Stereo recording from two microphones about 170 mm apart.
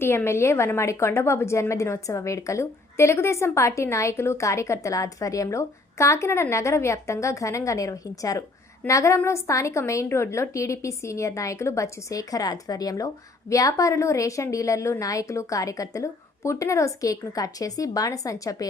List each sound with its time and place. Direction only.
0.0 s a woman's voice: 15° left (ahead or behind)